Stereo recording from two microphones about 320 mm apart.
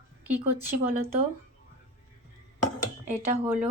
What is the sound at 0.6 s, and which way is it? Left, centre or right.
Speech, centre.